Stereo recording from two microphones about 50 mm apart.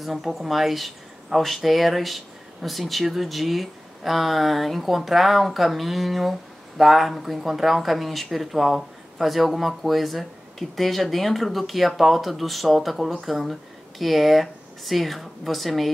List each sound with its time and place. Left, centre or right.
0.0 s speech: centre